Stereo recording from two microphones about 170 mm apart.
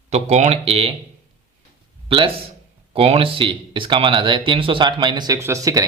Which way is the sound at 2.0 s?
30° right (ahead or behind).